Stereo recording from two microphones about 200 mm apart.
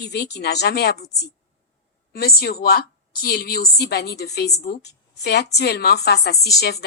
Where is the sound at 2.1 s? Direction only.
50° left (ahead or behind).